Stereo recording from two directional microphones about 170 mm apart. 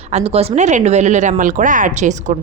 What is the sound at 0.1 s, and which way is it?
Speech, 35° right (ahead or behind).